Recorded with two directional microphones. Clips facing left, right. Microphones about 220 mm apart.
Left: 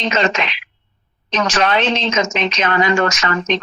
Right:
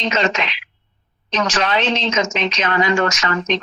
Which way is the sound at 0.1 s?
55° left (ahead or behind).